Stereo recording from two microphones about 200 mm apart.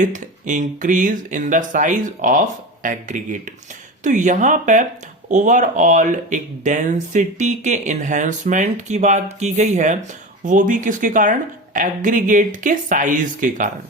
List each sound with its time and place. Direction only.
0.0 s speech: 40° right (ahead or behind)